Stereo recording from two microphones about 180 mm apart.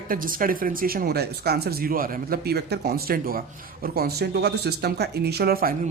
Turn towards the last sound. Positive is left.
turn(degrees=-55)  # may be behind; listen again after turning